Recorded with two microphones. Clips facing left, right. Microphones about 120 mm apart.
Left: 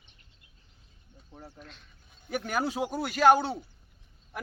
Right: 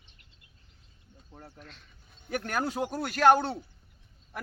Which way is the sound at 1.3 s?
Centre (ahead or behind).